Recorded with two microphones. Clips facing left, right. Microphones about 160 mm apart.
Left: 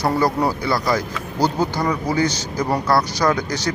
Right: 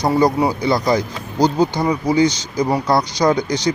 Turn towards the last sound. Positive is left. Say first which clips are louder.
# right 3 dB
turn(degrees=-20)  # may be behind; listen again after turning